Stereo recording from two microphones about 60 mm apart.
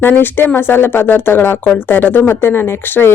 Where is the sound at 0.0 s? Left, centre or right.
Left.